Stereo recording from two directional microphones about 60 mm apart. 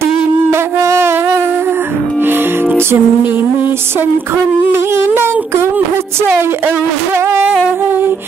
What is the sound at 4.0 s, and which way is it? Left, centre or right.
Speech, right.